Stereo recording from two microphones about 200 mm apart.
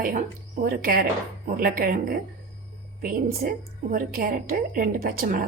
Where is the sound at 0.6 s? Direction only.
45° right (ahead or behind).